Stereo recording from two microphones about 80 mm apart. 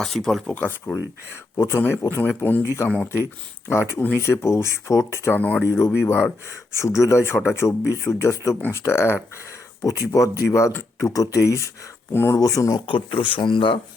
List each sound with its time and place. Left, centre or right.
0.3 s speech: centre
0.5 s speech: centre
1.5 s speech: left
1.8 s speech: left
2.6 s speech: left
4.2 s speech: left
5.3 s speech: left
5.6 s speech: left
6.8 s speech: left
9.8 s speech: left
12.1 s speech: left
12.4 s speech: left
12.8 s speech: left